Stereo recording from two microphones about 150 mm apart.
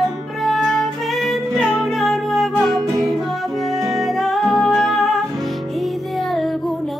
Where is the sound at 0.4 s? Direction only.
Centre (ahead or behind).